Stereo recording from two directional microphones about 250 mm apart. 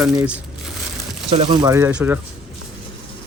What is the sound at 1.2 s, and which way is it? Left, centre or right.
Speech, right.